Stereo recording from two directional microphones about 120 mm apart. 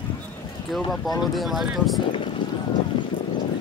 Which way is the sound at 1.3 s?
Centre (ahead or behind).